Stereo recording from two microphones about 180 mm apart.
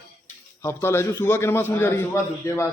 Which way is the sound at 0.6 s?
15° left (ahead or behind).